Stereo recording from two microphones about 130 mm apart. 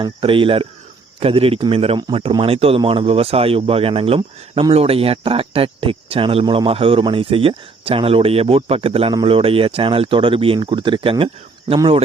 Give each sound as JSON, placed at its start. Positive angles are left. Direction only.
{"t": 0.0, "sound": "speech", "side_deg": -40}